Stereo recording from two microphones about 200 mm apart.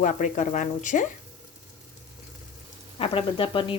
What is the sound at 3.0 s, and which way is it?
Speech, 25° left (ahead or behind).